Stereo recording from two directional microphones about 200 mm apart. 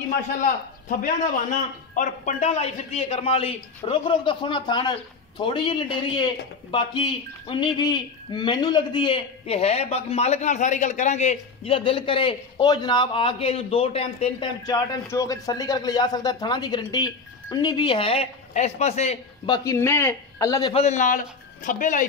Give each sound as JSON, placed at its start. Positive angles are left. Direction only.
{"t": 0.4, "sound": "a man's voice", "side_deg": 40}
{"t": 14.9, "sound": "speech", "side_deg": 15}
{"t": 19.5, "sound": "a man's voice", "side_deg": 15}
{"t": 20.7, "sound": "a man's voice", "side_deg": 35}